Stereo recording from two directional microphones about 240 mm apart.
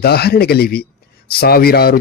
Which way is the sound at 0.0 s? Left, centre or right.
Left.